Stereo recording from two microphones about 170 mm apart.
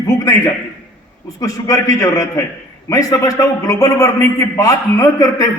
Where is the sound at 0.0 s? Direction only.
20° left (ahead or behind).